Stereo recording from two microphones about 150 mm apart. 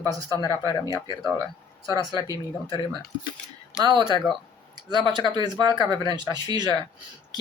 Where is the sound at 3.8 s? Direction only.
30° right (ahead or behind).